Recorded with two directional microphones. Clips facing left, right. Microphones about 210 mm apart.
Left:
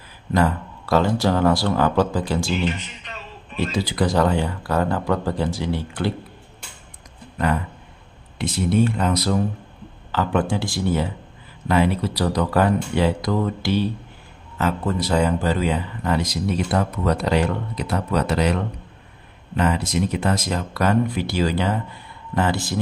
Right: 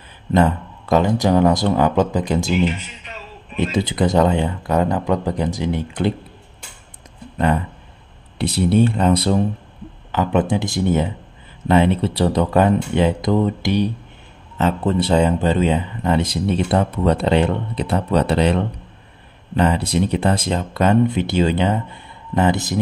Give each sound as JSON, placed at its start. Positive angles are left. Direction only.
{"t": 0.3, "sound": "speech", "side_deg": -20}
{"t": 7.3, "sound": "speech", "side_deg": -25}
{"t": 8.6, "sound": "speech", "side_deg": -30}